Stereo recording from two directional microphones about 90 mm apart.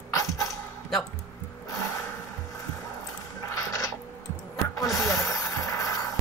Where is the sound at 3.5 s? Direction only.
40° left (ahead or behind).